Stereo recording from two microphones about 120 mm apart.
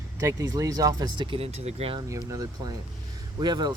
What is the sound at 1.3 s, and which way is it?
Speech, 60° right (ahead or behind).